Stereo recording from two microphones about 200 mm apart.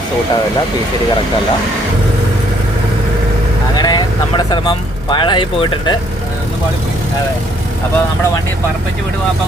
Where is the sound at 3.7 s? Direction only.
20° left (ahead or behind).